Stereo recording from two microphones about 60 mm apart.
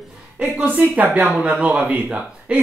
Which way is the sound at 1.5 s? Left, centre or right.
Centre.